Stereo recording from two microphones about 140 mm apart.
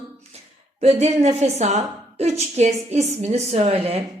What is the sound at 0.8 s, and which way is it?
A woman's voice, 50° right (ahead or behind).